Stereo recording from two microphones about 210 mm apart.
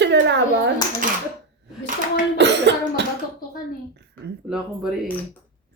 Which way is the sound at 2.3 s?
55° right (ahead or behind).